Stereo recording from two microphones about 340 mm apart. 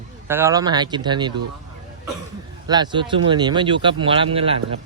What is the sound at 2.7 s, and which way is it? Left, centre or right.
Speech, centre.